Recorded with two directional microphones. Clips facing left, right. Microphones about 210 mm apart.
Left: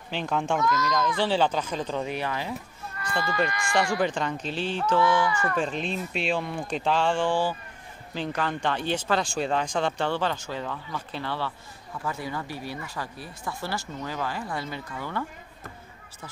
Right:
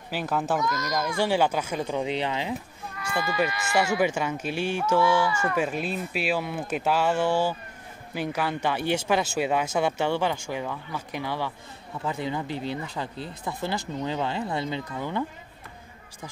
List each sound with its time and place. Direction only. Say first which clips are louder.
0.1 s a child's voice: even; 5° right (ahead or behind)
3.0 s speech: right 1 dB; 10° right (ahead or behind)